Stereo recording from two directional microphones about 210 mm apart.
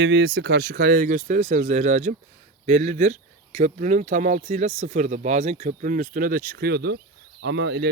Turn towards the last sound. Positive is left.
turn(degrees=-55)  # may be behind; listen again after turning